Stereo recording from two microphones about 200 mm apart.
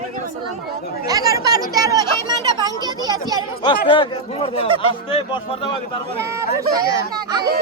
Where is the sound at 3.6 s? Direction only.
25° left (ahead or behind).